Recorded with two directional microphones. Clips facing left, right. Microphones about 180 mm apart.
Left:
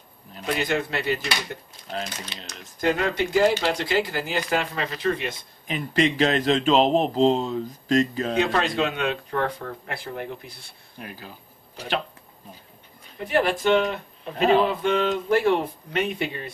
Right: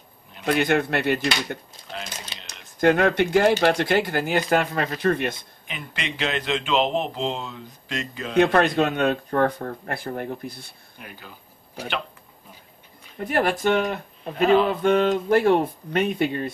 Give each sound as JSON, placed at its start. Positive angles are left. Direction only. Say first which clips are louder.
{"t": 0.5, "sound": "speech", "louder": "right 4 dB", "side_deg": -60}
{"t": 2.8, "sound": "speech", "louder": "right 5 dB", "side_deg": -60}
{"t": 5.7, "sound": "speech", "louder": "left 11 dB", "side_deg": 40}
{"t": 8.4, "sound": "speech", "louder": "right 6 dB", "side_deg": -55}
{"t": 13.2, "sound": "speech", "louder": "even", "side_deg": -50}